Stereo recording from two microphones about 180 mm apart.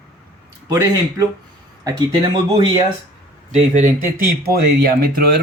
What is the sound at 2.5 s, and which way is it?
Speech, 25° right (ahead or behind).